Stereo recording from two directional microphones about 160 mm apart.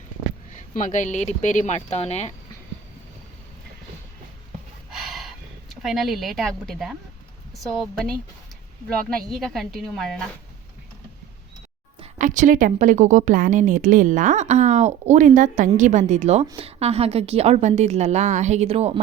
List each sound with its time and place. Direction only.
0.5 s speech: 50° left (ahead or behind)
4.9 s gasp: 5° right (ahead or behind)
5.8 s a woman's voice: centre (ahead or behind)
9.3 s a woman's voice: centre (ahead or behind)
12.2 s a woman's voice: 55° right (ahead or behind)